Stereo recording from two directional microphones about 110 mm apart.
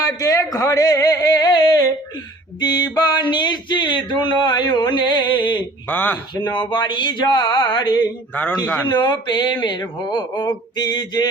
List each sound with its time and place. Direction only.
0.0 s speech: 30° left (ahead or behind)
2.6 s a sound: 40° left (ahead or behind)
5.9 s speech: 15° left (ahead or behind)
6.6 s speech: 45° left (ahead or behind)